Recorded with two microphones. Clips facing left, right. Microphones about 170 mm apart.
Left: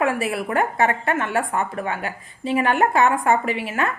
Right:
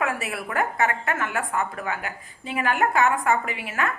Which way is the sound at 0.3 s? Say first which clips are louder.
Left 5 dB; 25° left (ahead or behind).